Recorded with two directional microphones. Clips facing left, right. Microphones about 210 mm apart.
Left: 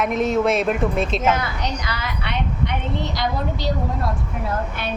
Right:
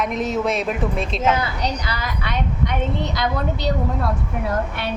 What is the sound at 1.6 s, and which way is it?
A woman's voice, 40° right (ahead or behind).